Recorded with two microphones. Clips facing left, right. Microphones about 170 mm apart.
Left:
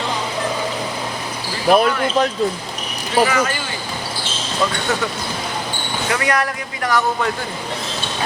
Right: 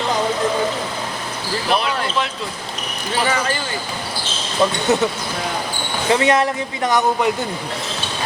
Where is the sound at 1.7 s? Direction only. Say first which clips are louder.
Left 6 dB; 45° left (ahead or behind).